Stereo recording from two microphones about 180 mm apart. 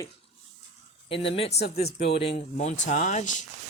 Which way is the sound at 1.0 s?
30° left (ahead or behind).